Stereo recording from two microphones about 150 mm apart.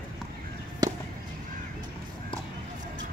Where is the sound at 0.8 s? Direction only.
25° right (ahead or behind).